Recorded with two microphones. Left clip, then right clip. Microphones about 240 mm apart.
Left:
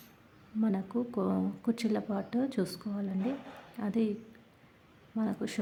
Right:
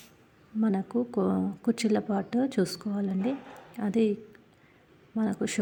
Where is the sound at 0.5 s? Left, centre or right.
Centre.